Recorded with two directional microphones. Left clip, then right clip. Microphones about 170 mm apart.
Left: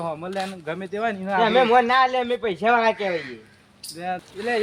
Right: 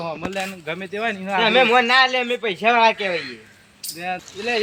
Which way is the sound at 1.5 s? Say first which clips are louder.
Right 2 dB; 25° left (ahead or behind).